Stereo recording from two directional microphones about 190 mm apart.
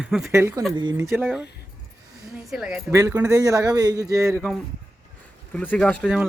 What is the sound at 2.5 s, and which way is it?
Speech, 5° right (ahead or behind).